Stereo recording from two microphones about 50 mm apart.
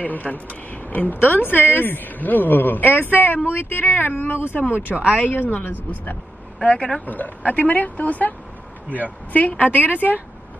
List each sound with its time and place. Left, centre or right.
0.0 s speech: left
4.9 s speech: right
5.2 s speech: left
6.6 s speech: left
7.1 s speech: left
8.8 s speech: right
9.3 s speech: left